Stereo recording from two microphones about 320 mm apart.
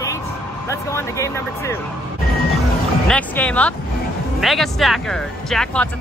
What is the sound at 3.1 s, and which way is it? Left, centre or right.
Speech, centre.